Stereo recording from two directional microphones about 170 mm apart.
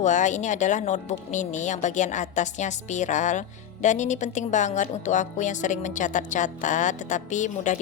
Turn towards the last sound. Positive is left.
turn(degrees=45)  # may be behind; listen again after turning